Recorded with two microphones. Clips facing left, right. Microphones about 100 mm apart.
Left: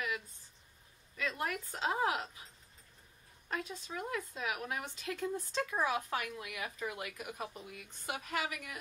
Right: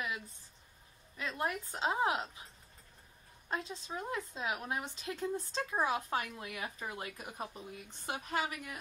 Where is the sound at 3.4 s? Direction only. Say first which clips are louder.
Right 1 dB; 25° right (ahead or behind).